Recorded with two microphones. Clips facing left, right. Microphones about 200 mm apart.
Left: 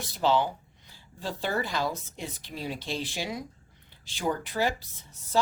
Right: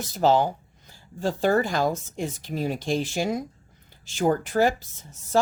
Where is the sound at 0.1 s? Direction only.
45° right (ahead or behind).